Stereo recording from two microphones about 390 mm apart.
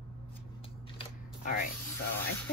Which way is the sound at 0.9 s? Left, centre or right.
Left.